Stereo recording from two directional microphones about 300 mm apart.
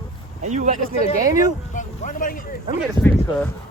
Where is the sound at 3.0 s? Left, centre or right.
Centre.